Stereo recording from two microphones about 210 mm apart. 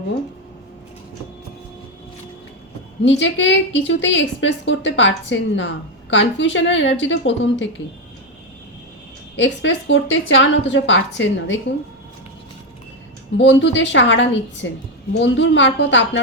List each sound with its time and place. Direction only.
3.0 s a woman's voice: 60° left (ahead or behind)
9.3 s a woman's voice: 60° left (ahead or behind)
13.3 s a woman's voice: 60° left (ahead or behind)